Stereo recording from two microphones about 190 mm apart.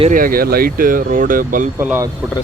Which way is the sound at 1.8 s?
10° right (ahead or behind).